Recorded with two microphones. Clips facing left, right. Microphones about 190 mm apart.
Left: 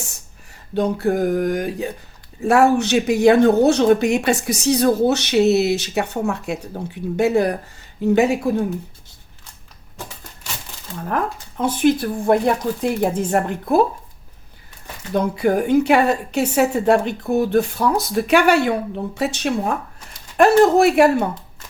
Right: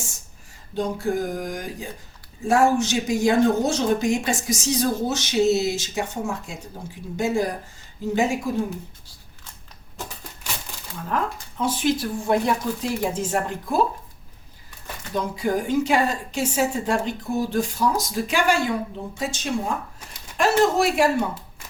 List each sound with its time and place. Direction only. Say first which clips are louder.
0.7 s speech: left 5 dB; 65° left (ahead or behind)
11.1 s speech: left 3 dB; 60° left (ahead or behind)
15.1 s speech: left 6 dB; 60° left (ahead or behind)
20.3 s speech: left 7 dB; 55° left (ahead or behind)